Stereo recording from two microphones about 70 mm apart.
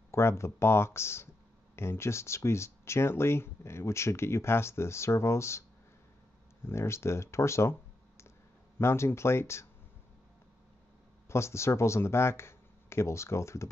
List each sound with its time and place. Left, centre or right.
0.1 s speech: left
6.6 s speech: left
8.7 s speech: left
11.2 s speech: left